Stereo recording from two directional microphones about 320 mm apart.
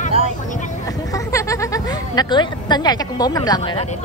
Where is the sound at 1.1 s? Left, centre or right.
Centre.